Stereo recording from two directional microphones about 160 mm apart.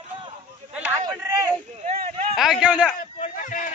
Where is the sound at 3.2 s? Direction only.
55° left (ahead or behind).